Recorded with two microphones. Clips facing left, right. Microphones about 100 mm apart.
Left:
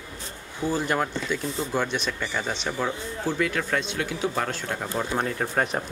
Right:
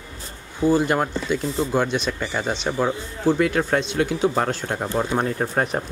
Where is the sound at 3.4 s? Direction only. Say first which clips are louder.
Right 6 dB; 35° right (ahead or behind).